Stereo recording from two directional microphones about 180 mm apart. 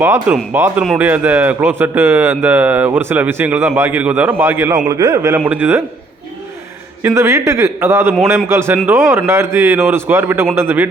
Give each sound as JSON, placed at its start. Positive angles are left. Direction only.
{"t": 0.0, "sound": "a man's voice", "side_deg": -15}
{"t": 7.0, "sound": "speech", "side_deg": -15}